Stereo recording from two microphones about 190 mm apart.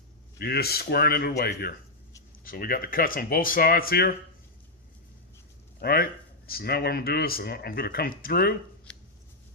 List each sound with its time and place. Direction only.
0.3 s speech: 55° left (ahead or behind)
5.8 s speech: 55° left (ahead or behind)
8.9 s a sound: 5° left (ahead or behind)